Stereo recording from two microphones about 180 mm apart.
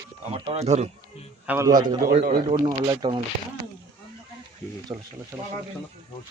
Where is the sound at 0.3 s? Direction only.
35° right (ahead or behind).